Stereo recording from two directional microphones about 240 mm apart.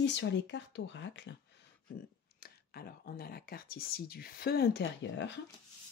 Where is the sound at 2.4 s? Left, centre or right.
Left.